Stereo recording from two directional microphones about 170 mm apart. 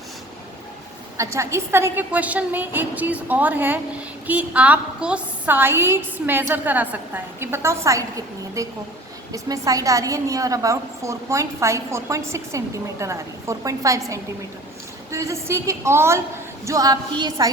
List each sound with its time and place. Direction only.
1.1 s a woman's voice: 20° right (ahead or behind)